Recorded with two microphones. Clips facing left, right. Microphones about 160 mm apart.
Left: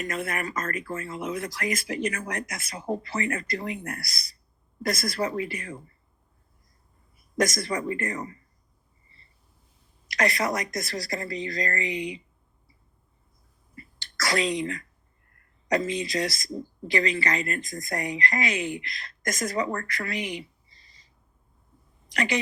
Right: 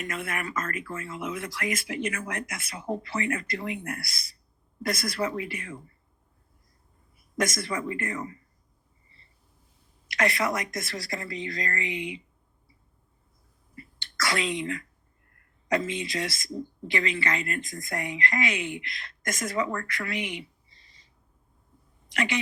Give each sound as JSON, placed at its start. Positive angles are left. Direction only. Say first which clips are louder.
{"t": 0.0, "sound": "speech", "louder": "left 3 dB", "side_deg": 40}
{"t": 7.2, "sound": "speech", "louder": "left 3 dB", "side_deg": 40}
{"t": 10.1, "sound": "speech", "louder": "left 1 dB", "side_deg": 40}
{"t": 13.7, "sound": "whispering", "louder": "right 1 dB", "side_deg": 40}
{"t": 15.4, "sound": "speech", "louder": "left 2 dB", "side_deg": 40}
{"t": 22.1, "sound": "a woman's voice", "louder": "left 2 dB", "side_deg": 40}